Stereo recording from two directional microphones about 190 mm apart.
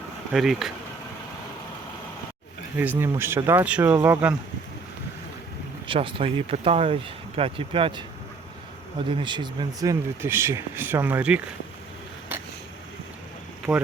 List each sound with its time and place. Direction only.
0.3 s speech: centre (ahead or behind)
2.7 s speech: 10° right (ahead or behind)
5.9 s speech: 30° right (ahead or behind)
9.0 s speech: 25° right (ahead or behind); by 11.4 s 5° right (ahead or behind)
13.7 s speech: 5° right (ahead or behind)